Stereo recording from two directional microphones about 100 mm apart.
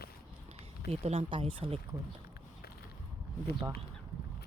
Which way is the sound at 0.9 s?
90° right.